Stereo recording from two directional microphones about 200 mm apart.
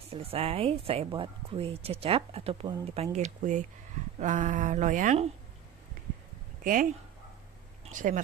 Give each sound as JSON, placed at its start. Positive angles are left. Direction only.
{"t": 0.1, "sound": "a woman's voice", "side_deg": -30}
{"t": 6.6, "sound": "speech", "side_deg": -45}